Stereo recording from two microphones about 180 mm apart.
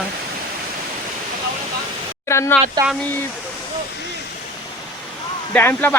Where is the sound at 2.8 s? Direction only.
20° right (ahead or behind).